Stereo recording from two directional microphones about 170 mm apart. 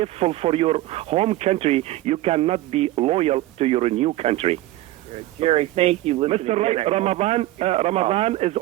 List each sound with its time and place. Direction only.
0.0 s speech: 35° right (ahead or behind)